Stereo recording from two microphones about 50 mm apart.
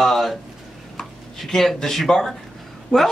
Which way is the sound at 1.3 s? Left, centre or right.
Centre.